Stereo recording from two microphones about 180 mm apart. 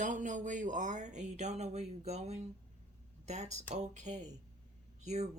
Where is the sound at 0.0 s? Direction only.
45° right (ahead or behind).